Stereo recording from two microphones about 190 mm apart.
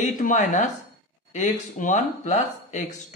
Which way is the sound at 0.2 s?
40° left (ahead or behind).